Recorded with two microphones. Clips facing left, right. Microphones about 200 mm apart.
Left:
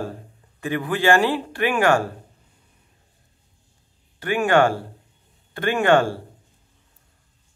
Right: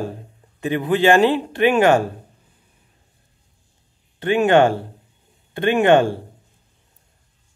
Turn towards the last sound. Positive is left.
turn(degrees=-20)  # may be behind; listen again after turning